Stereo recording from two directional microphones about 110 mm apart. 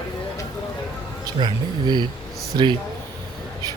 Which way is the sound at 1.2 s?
40° right (ahead or behind).